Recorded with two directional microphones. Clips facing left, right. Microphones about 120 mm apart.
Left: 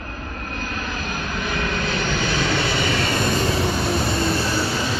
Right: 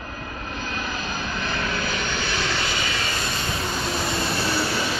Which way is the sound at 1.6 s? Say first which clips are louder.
Left 3 dB; 5° right (ahead or behind).